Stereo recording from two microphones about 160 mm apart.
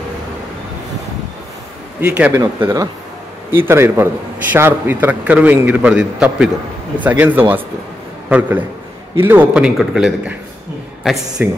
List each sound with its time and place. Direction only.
2.0 s speech: 10° right (ahead or behind)
2.3 s a man's voice: 20° right (ahead or behind); by 10.3 s 5° right (ahead or behind)
11.4 s a man's voice: 10° right (ahead or behind)